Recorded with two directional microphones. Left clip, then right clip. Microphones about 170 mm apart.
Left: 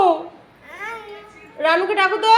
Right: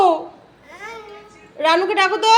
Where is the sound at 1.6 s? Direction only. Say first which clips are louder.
Right 1 dB; 15° right (ahead or behind).